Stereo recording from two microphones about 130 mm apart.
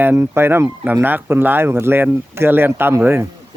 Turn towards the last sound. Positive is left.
turn(degrees=-20)  # may be behind; listen again after turning